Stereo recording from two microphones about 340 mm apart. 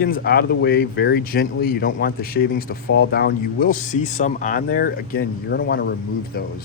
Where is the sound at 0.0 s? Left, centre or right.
Left.